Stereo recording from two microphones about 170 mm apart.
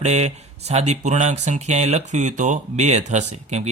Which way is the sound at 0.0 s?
40° right (ahead or behind).